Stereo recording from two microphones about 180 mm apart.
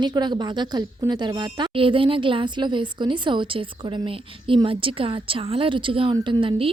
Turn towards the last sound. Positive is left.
turn(degrees=-30)  # may be behind; listen again after turning